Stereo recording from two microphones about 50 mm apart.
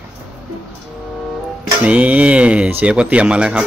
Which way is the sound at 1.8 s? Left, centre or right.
Right.